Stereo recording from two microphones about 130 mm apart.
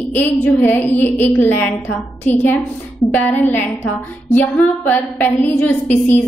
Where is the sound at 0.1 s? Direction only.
15° left (ahead or behind).